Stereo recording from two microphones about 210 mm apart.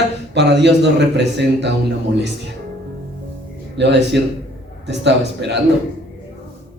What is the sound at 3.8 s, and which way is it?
A man's voice, 55° right (ahead or behind).